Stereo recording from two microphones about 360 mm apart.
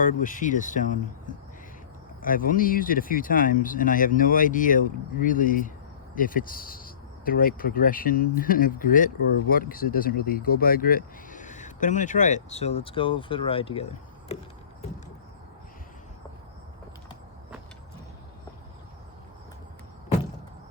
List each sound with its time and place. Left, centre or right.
0.0 s speech: left
2.2 s speech: left